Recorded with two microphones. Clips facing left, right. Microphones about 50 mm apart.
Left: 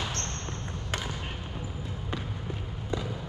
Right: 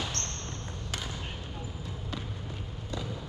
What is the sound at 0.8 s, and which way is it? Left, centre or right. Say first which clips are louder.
Basketball bounce: left 4 dB; left.